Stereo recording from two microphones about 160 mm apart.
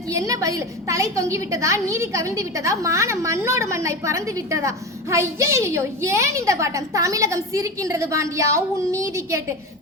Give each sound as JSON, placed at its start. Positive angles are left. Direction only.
{"t": 0.1, "sound": "a woman's voice", "side_deg": -20}